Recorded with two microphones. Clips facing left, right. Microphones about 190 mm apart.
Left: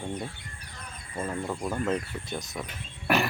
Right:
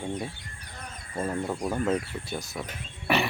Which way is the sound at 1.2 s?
15° right (ahead or behind).